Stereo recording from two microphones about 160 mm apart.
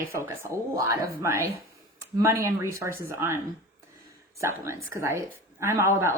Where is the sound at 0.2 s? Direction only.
15° right (ahead or behind).